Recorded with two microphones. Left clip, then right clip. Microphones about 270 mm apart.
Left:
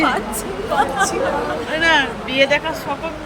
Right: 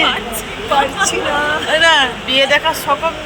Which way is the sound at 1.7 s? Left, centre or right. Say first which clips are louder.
Right 4 dB; centre.